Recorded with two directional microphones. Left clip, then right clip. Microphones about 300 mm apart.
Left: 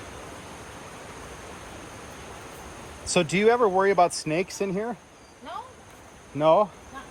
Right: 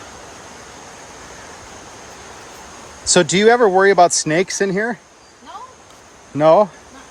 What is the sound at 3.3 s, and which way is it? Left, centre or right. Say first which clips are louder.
Speech: right 8 dB; right.